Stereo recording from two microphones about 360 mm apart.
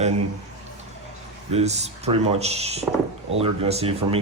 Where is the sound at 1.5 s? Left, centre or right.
Centre.